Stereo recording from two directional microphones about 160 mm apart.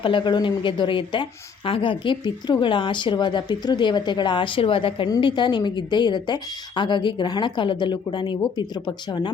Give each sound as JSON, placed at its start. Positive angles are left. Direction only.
{"t": 0.0, "sound": "a woman's voice", "side_deg": 30}